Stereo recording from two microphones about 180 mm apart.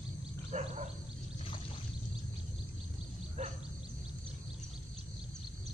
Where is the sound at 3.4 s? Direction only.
40° right (ahead or behind).